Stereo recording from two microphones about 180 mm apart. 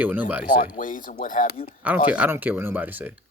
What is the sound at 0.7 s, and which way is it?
Speech, 50° left (ahead or behind).